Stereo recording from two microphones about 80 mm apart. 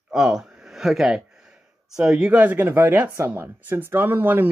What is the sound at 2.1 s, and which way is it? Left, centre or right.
Speech, centre.